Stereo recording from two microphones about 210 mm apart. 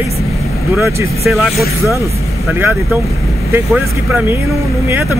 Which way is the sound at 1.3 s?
Centre (ahead or behind).